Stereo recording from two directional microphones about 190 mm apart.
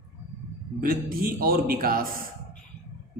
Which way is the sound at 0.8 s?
50° right (ahead or behind).